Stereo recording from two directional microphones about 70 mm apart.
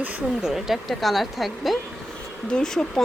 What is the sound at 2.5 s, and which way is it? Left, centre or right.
Speech, centre.